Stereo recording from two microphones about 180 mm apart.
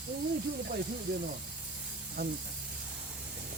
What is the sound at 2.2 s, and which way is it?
Speech, 60° right (ahead or behind).